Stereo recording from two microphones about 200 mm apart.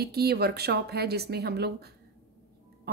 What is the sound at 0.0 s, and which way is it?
Speech, 50° right (ahead or behind).